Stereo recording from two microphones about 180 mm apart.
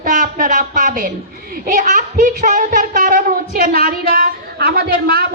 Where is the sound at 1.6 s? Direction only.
45° right (ahead or behind).